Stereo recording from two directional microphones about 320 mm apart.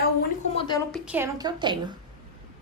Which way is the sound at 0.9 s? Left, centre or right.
Centre.